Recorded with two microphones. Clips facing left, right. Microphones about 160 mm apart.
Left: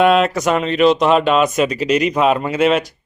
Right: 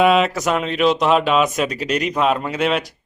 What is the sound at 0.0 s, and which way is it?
Speech, centre (ahead or behind).